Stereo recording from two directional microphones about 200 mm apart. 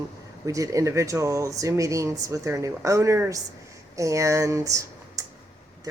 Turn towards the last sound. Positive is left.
turn(degrees=-15)  # may be behind; listen again after turning